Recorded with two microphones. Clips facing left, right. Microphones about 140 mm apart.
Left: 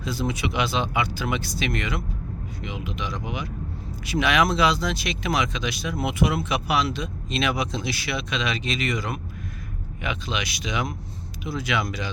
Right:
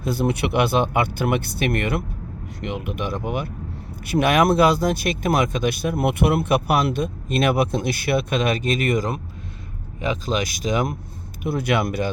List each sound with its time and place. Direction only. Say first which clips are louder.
0.0 s speech: right 5 dB; 55° right (ahead or behind)
10.0 s speech: right 6 dB; 40° right (ahead or behind)
11.4 s speech: right 5 dB; 55° right (ahead or behind)